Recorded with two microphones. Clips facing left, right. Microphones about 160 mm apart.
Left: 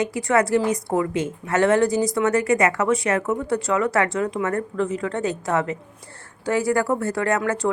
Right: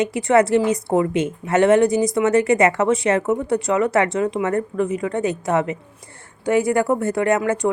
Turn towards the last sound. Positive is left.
turn(degrees=-15)  # may be behind; listen again after turning